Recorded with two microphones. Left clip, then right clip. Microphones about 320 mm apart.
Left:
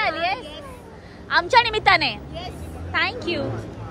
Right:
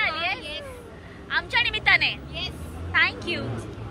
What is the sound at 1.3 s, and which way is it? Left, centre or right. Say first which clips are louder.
Speech: left 6 dB; centre.